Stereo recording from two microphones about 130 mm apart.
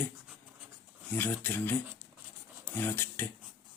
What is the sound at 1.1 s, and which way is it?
Speech, 15° left (ahead or behind).